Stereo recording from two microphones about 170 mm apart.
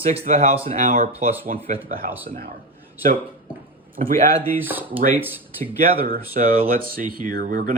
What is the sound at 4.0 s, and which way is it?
Speech, 40° right (ahead or behind).